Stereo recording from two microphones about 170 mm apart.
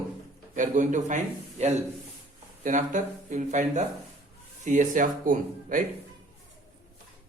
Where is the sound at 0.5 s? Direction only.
50° right (ahead or behind).